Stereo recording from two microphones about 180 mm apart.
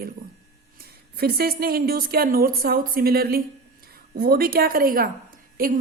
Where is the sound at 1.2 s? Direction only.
60° right (ahead or behind).